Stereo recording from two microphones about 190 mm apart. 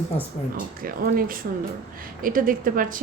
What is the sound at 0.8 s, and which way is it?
A woman's voice, 50° right (ahead or behind).